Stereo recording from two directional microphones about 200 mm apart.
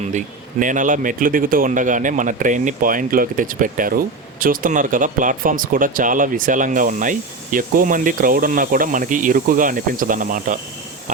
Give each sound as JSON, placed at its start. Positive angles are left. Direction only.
{"t": 0.6, "sound": "speech", "side_deg": -40}